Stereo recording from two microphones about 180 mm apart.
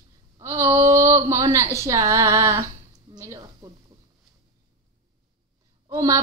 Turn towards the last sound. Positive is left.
turn(degrees=-20)  # may be behind; listen again after turning